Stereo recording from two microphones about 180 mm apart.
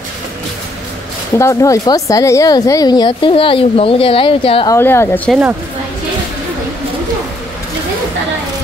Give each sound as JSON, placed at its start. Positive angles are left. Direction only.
{"t": 1.4, "sound": "speech", "side_deg": 15}
{"t": 4.6, "sound": "a woman's voice", "side_deg": 15}